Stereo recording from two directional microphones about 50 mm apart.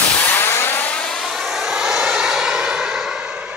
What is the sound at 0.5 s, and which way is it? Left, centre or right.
Vehicle, left.